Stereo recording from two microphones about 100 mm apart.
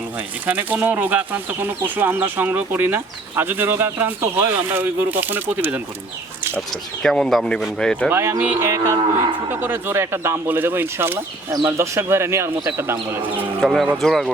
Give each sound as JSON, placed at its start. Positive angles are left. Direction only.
{"t": 0.4, "sound": "speech", "side_deg": -15}
{"t": 7.0, "sound": "speech", "side_deg": 5}
{"t": 8.1, "sound": "speech", "side_deg": -25}
{"t": 13.6, "sound": "speech", "side_deg": 5}